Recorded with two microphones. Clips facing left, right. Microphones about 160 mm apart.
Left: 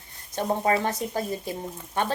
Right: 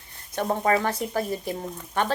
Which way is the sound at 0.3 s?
25° left (ahead or behind).